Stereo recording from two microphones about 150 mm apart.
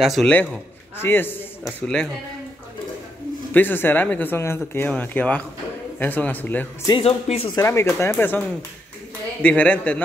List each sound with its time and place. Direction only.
0.0 s a man's voice: centre (ahead or behind)
1.0 s speech: 15° left (ahead or behind)
3.5 s speech: 15° left (ahead or behind)
6.9 s speech: 40° left (ahead or behind)
7.5 s speech: 15° left (ahead or behind)